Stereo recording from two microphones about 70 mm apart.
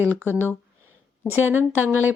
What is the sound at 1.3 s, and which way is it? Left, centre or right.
Speech, right.